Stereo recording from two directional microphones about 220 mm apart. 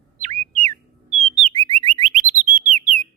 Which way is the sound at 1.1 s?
25° right (ahead or behind).